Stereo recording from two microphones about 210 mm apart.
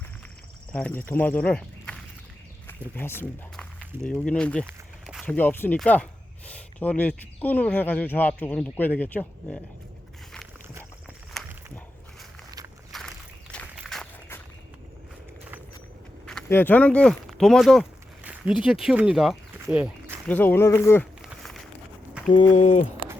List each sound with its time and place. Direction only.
0.7 s speech: 5° left (ahead or behind)
11.3 s a sound: centre (ahead or behind)
12.9 s walk: centre (ahead or behind)
16.2 s speech: 5° left (ahead or behind); by 20.1 s 10° right (ahead or behind)
20.2 s speech: 10° left (ahead or behind)
21.2 s a sound: centre (ahead or behind)
22.5 s speech: 35° left (ahead or behind)